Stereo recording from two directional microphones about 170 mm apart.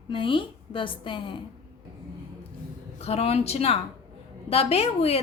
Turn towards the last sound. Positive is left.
turn(degrees=35)  # may be behind; listen again after turning